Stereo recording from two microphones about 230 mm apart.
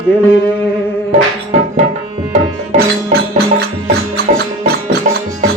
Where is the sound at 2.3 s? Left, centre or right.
Right.